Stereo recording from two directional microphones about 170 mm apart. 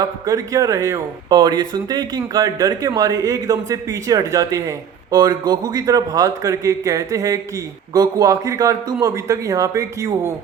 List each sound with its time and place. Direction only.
0.0 s speech: 20° right (ahead or behind)